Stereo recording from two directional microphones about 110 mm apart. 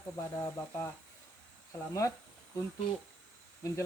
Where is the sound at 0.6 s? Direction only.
25° left (ahead or behind).